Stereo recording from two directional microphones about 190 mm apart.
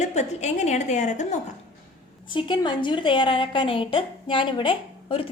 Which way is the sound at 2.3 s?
25° left (ahead or behind).